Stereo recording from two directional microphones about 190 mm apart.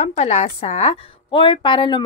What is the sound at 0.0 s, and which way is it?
Speech, 35° left (ahead or behind).